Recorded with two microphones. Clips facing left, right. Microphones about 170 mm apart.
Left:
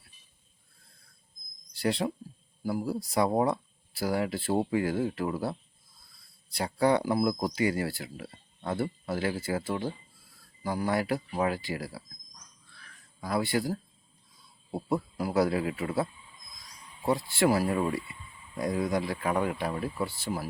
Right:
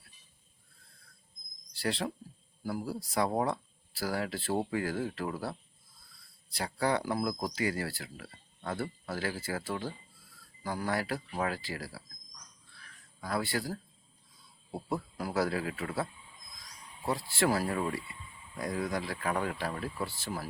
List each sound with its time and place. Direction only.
1.7 s speech: 15° left (ahead or behind)
13.2 s speech: 15° left (ahead or behind)
15.4 s speech: 20° left (ahead or behind)
17.1 s speech: 20° left (ahead or behind)